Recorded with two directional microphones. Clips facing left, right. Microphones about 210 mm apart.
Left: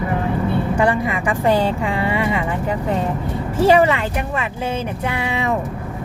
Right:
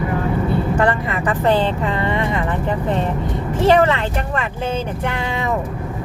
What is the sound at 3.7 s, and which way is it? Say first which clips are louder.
Speech: even; 10° left (ahead or behind).